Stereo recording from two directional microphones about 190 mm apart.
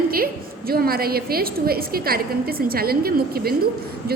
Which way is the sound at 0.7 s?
55° right (ahead or behind).